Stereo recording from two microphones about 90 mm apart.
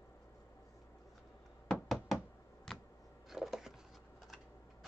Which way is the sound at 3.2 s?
5° right (ahead or behind).